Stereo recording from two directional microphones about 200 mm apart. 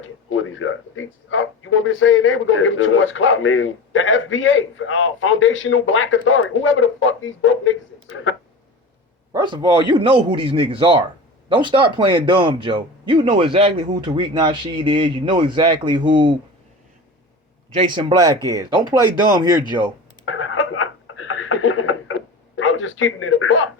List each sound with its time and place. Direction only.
0.0 s speech: 85° left
9.3 s speech: 20° right (ahead or behind)
17.7 s speech: 25° right (ahead or behind)
20.2 s a sound: 90° left